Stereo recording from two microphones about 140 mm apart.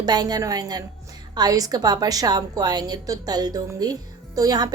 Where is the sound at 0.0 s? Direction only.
30° right (ahead or behind).